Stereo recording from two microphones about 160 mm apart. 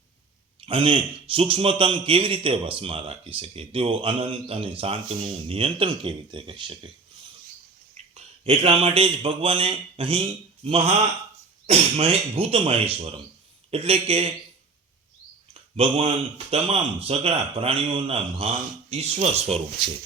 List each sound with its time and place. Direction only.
0.6 s a man's voice: 35° right (ahead or behind)
8.1 s a man's voice: 40° right (ahead or behind)
15.7 s a man's voice: 35° right (ahead or behind)